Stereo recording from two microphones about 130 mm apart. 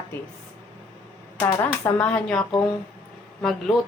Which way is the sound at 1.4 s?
25° left (ahead or behind).